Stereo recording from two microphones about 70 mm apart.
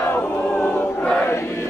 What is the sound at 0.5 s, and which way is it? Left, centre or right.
Battle cry, centre.